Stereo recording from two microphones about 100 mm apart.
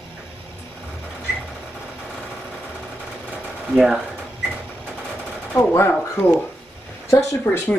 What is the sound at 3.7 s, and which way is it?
Speech, 5° right (ahead or behind).